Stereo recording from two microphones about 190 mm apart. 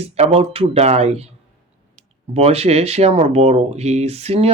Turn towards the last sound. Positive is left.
turn(degrees=-30)  # may be behind; listen again after turning